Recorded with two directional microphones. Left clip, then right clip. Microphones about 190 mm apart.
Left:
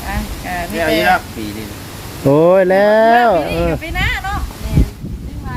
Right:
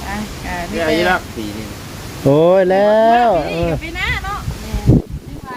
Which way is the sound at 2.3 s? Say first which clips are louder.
Left 1 dB; 5° left (ahead or behind).